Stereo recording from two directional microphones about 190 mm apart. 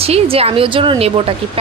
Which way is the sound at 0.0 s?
30° right (ahead or behind).